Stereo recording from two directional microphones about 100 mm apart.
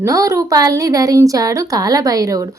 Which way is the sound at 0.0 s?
30° right (ahead or behind).